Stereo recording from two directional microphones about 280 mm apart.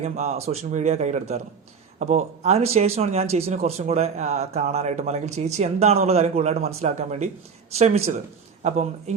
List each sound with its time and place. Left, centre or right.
0.0 s a man's voice: right